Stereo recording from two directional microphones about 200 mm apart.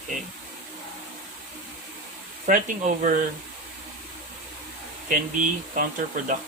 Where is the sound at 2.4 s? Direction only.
40° right (ahead or behind).